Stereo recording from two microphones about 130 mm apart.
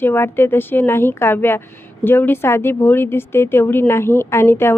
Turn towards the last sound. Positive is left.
turn(degrees=20)  # may be behind; listen again after turning